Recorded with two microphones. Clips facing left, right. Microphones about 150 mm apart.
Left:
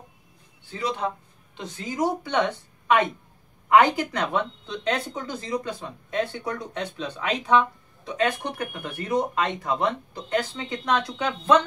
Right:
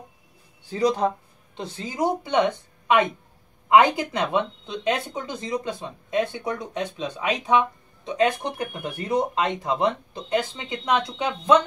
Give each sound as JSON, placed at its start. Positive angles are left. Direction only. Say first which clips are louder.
{"t": 0.7, "sound": "speech", "louder": "right 6 dB", "side_deg": -40}
{"t": 1.6, "sound": "speech", "louder": "right 1 dB", "side_deg": -25}